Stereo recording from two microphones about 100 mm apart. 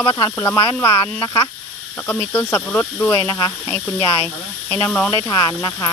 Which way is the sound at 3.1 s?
30° left (ahead or behind).